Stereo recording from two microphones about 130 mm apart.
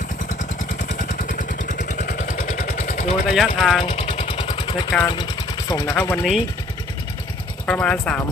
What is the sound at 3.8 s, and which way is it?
Vehicle, 50° left (ahead or behind).